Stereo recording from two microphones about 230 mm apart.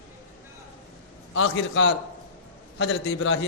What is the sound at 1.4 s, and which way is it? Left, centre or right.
A man's voice, left.